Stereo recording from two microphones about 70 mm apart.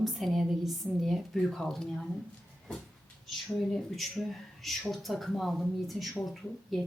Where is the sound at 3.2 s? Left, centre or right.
Centre.